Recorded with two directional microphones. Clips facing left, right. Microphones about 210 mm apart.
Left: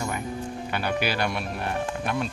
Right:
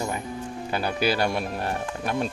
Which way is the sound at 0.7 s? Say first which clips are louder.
Right 3 dB; 30° right (ahead or behind).